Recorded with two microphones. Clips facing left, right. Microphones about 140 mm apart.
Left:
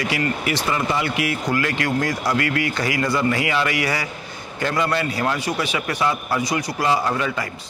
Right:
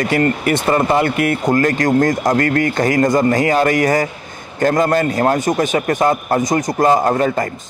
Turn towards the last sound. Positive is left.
turn(degrees=-45)  # may be behind; listen again after turning